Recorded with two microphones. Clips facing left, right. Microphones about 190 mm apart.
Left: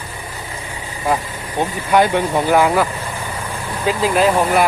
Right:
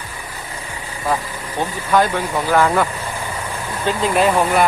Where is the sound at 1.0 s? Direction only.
20° left (ahead or behind).